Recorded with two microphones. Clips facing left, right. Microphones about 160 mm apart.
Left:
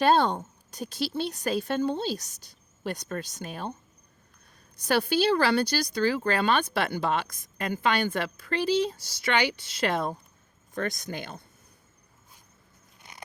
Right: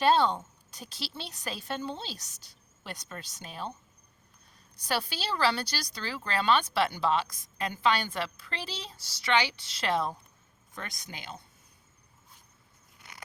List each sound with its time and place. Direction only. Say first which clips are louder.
0.0 s speech: left 2 dB; 50° left (ahead or behind)
4.8 s speech: left 9 dB; 50° left (ahead or behind)
13.0 s scissors: left 2 dB; 20° left (ahead or behind)